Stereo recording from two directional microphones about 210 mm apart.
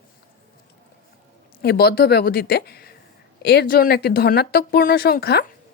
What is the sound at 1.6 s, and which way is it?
Speech, 50° left (ahead or behind).